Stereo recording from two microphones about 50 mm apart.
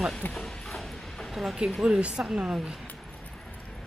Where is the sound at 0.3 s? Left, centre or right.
Centre.